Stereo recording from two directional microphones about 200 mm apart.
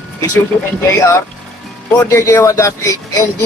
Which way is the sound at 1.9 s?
15° left (ahead or behind).